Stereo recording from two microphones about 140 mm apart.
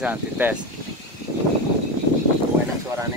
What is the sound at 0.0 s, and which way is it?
Speech, 10° right (ahead or behind).